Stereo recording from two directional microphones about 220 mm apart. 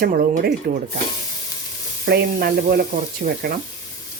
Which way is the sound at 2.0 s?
45° right (ahead or behind).